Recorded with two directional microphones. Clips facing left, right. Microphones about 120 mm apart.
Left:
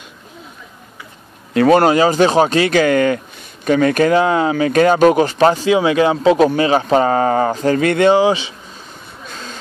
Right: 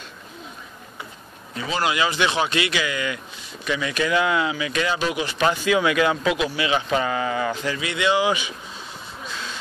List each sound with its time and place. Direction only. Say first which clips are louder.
1.7 s speech: left 11 dB; 50° left (ahead or behind); by 6.4 s 30° left (ahead or behind)
6.4 s speech: left 10 dB; 45° left (ahead or behind)
8.3 s speech: left 7 dB; 30° left (ahead or behind)
9.3 s a sound: left 2 dB; 45° left (ahead or behind)